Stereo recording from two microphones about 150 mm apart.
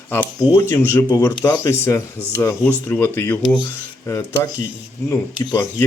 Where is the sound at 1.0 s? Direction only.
25° left (ahead or behind).